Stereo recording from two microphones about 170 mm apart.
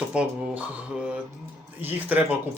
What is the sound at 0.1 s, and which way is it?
Speech, 5° right (ahead or behind).